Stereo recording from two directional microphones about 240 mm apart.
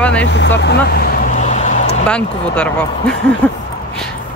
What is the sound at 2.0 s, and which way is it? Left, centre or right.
Speech, centre.